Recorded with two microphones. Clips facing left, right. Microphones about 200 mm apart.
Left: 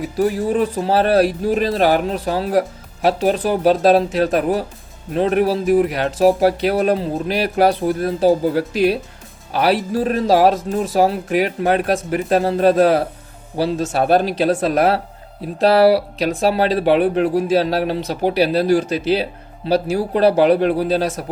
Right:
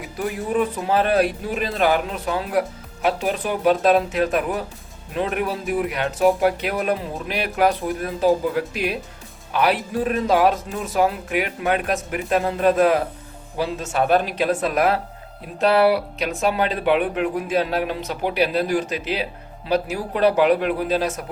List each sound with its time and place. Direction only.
0.2 s speech: 35° left (ahead or behind)